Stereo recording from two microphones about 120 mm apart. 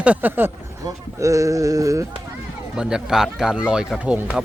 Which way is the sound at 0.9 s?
25° right (ahead or behind).